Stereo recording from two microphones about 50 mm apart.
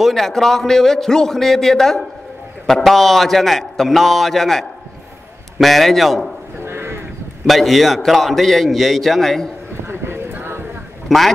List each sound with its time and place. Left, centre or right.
0.1 s a man's voice: centre
6.6 s a sound: right
7.4 s a man's voice: centre
9.8 s clip-clop: right
11.1 s a man's voice: centre